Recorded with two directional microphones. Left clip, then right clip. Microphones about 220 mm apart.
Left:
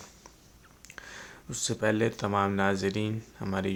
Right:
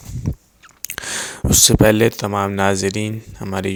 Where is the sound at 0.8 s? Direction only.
50° right (ahead or behind).